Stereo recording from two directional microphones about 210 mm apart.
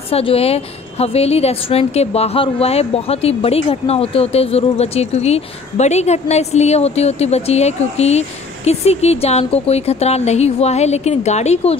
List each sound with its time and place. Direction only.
0.1 s a woman's voice: 30° left (ahead or behind)